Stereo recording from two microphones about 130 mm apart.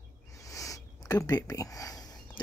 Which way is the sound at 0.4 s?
25° left (ahead or behind).